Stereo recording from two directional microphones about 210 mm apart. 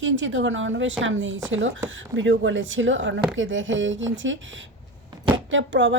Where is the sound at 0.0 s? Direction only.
65° right (ahead or behind).